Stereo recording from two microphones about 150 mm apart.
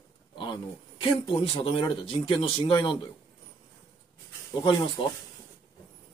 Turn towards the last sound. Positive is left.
turn(degrees=25)  # may be behind; listen again after turning